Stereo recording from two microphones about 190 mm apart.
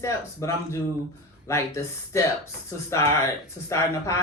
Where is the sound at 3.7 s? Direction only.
15° left (ahead or behind).